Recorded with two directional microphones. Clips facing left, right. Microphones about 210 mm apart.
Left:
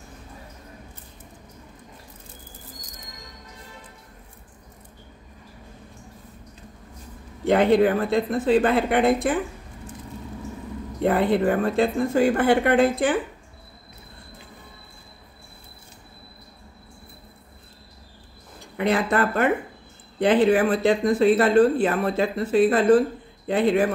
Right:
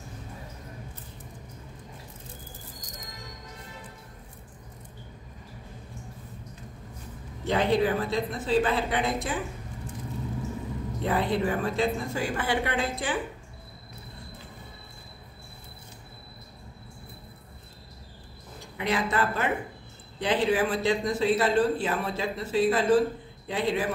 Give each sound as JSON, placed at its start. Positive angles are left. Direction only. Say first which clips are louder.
{"t": 7.4, "sound": "speech", "louder": "left 7 dB", "side_deg": 55}
{"t": 11.0, "sound": "speech", "louder": "left 7 dB", "side_deg": 55}
{"t": 18.8, "sound": "speech", "louder": "left 6 dB", "side_deg": 55}